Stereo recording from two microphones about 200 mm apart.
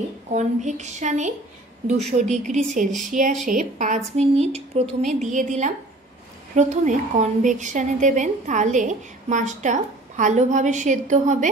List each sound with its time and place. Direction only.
0.3 s a woman's voice: 35° right (ahead or behind)